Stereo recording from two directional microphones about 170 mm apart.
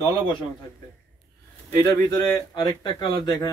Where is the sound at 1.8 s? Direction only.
25° left (ahead or behind).